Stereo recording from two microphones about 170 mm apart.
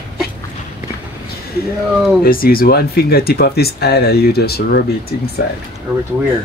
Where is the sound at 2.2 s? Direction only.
60° left (ahead or behind).